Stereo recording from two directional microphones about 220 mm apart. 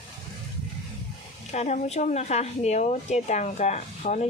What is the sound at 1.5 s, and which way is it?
Speech, 30° left (ahead or behind).